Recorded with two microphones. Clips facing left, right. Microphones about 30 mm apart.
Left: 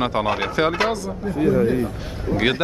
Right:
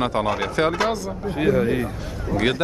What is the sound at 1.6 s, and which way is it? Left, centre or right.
Speech, right.